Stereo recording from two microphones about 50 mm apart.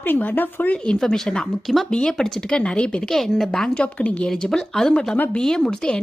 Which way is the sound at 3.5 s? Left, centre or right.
Centre.